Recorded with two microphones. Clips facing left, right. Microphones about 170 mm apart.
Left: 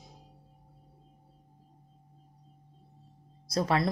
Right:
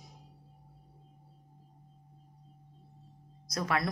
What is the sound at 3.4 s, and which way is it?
Speech, 30° left (ahead or behind).